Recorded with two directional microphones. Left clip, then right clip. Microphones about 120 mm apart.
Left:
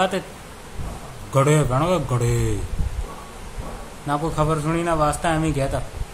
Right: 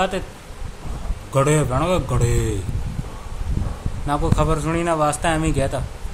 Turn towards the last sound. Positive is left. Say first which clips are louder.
# right 1 dB
turn(degrees=-10)  # may be behind; listen again after turning